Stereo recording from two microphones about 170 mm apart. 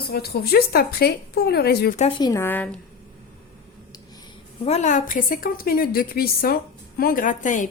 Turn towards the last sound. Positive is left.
turn(degrees=50)  # may be behind; listen again after turning